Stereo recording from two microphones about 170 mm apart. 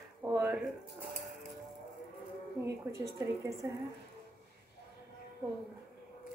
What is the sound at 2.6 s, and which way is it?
A woman's voice, 20° right (ahead or behind).